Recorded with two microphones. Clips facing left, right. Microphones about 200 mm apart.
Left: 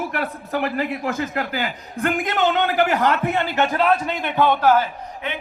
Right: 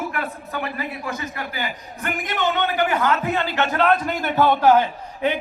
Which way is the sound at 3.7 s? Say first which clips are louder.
Right 2 dB; 10° left (ahead or behind).